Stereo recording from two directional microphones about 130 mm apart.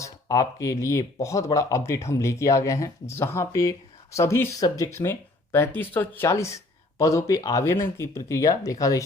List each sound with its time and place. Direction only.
0.0 s speech: 25° left (ahead or behind)